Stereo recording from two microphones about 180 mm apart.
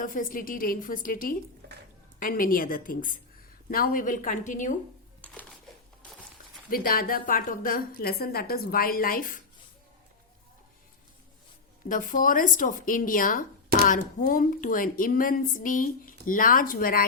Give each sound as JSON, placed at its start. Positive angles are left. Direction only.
{"t": 0.0, "sound": "a woman's voice", "side_deg": 50}
{"t": 5.2, "sound": "a sound", "side_deg": 10}
{"t": 6.7, "sound": "a woman's voice", "side_deg": 55}
{"t": 11.9, "sound": "a woman's voice", "side_deg": 45}